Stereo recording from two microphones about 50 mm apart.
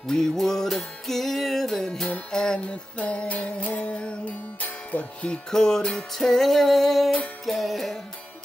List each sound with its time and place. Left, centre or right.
0.0 s music: centre
5.5 s music: centre